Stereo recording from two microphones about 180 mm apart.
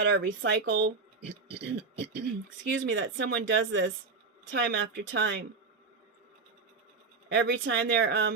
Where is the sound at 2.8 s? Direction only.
90° right; by 5.4 s 75° right (ahead or behind).